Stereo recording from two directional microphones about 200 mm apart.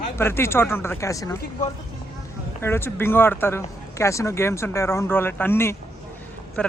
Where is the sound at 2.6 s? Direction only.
10° left (ahead or behind).